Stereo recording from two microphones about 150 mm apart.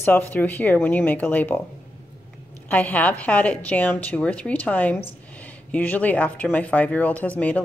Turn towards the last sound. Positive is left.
turn(degrees=10)  # may be behind; listen again after turning